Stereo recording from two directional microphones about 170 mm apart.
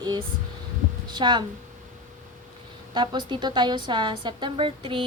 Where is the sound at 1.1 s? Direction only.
25° right (ahead or behind).